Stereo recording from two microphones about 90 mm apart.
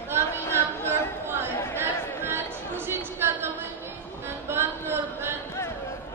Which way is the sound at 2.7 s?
25° right (ahead or behind).